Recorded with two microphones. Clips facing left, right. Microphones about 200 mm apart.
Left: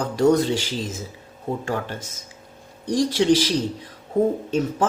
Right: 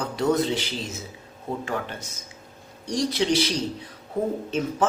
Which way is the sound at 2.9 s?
50° left (ahead or behind).